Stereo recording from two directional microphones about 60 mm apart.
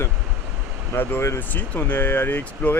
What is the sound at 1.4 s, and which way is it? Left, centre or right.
Speech, left.